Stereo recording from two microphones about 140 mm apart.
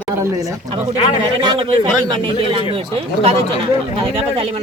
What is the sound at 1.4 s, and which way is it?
Speech, 40° right (ahead or behind).